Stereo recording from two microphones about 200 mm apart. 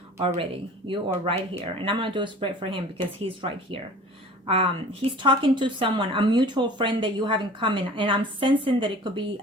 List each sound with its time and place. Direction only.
0.9 s a woman's voice: 30° right (ahead or behind)